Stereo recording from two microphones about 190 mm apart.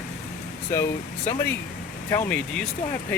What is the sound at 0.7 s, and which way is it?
Speech, 15° left (ahead or behind).